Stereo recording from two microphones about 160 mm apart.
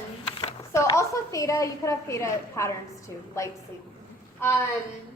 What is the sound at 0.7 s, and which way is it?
A woman's voice, 20° left (ahead or behind).